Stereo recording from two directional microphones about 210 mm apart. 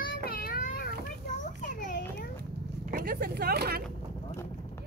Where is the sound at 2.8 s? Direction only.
45° right (ahead or behind).